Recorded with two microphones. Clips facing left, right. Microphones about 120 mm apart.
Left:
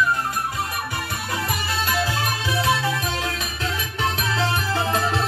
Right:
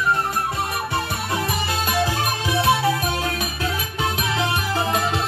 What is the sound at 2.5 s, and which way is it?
Music, 25° right (ahead or behind).